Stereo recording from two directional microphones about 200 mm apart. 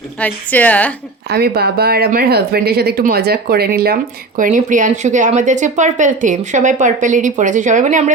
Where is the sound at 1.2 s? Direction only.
50° right (ahead or behind).